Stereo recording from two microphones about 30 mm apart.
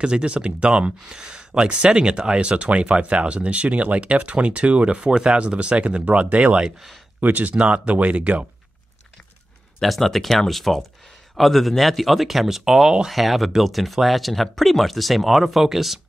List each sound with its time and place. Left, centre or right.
0.2 s speech: right
7.2 s speech: right
7.5 s speech: right
9.8 s speech: centre